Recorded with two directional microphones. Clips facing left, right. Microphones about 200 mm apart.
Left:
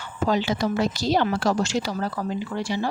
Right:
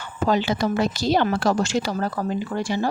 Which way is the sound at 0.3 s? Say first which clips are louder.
Right 2 dB; 55° right (ahead or behind).